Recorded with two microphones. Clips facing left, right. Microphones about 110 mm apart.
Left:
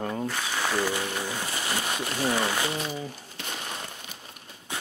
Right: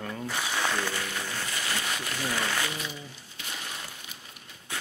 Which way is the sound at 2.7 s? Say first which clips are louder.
Left 6 dB; 40° left (ahead or behind).